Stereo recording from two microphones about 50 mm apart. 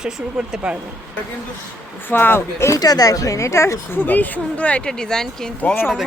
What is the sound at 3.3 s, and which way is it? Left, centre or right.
Speech, left.